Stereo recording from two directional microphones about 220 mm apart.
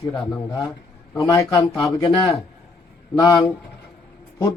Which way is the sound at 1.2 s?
15° left (ahead or behind).